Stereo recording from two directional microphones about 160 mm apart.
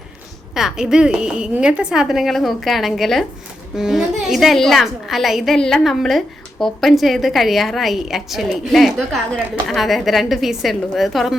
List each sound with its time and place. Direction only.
0.5 s a woman's voice: 5° right (ahead or behind)